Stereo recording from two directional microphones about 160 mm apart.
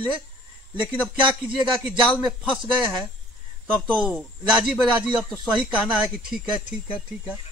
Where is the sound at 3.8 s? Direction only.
Centre (ahead or behind).